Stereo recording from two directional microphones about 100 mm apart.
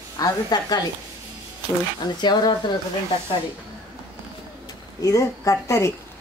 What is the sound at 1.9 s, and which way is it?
Speech, 45° left (ahead or behind).